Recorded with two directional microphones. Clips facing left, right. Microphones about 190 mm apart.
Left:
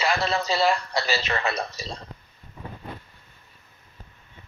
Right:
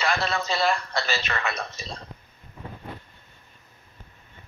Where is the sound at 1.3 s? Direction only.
30° left (ahead or behind).